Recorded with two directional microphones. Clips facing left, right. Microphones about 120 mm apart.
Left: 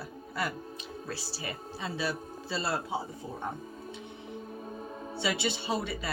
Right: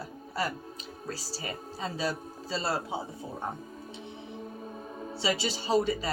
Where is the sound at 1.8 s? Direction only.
35° right (ahead or behind).